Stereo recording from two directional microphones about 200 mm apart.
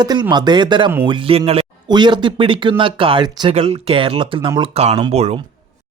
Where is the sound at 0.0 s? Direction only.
20° right (ahead or behind).